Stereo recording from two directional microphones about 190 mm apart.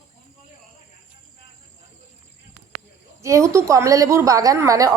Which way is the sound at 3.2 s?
15° right (ahead or behind).